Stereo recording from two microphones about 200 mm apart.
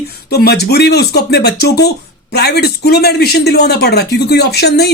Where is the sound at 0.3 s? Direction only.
50° left (ahead or behind).